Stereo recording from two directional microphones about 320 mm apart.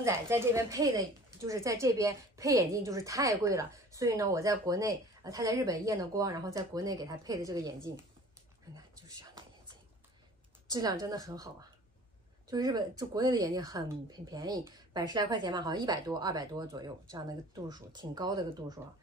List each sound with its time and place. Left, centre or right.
0.0 s speech: centre
10.7 s speech: centre